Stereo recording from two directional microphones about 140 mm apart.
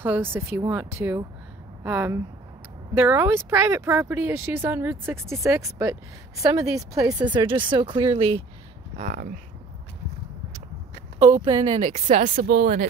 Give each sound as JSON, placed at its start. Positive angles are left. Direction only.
{"t": 0.0, "sound": "speech", "side_deg": -15}
{"t": 8.9, "sound": "speech", "side_deg": -65}
{"t": 11.6, "sound": "speech", "side_deg": -55}